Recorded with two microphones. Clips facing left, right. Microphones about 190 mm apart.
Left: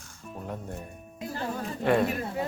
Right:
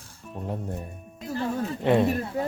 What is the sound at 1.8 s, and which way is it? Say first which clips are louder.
Speech: right 2 dB; 20° right (ahead or behind).